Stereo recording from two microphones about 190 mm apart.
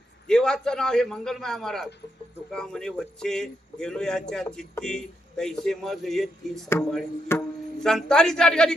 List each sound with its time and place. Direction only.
0.3 s speech: 5° left (ahead or behind)
7.3 s music: 5° left (ahead or behind)